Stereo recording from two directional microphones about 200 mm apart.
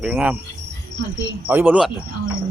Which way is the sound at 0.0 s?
10° right (ahead or behind).